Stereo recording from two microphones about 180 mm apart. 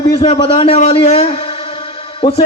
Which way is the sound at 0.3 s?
30° left (ahead or behind).